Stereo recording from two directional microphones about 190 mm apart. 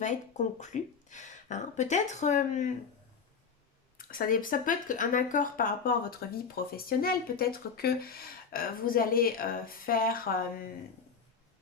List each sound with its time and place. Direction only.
0.0 s speech: 40° left (ahead or behind)
3.9 s speech: 50° left (ahead or behind)